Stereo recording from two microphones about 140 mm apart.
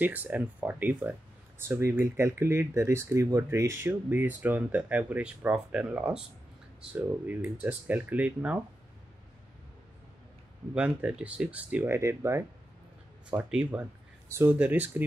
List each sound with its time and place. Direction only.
0.0 s speech: 10° right (ahead or behind)
10.7 s speech: 10° right (ahead or behind)
13.3 s speech: 5° right (ahead or behind)